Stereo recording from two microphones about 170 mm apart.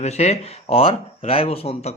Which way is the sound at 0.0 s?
40° left (ahead or behind).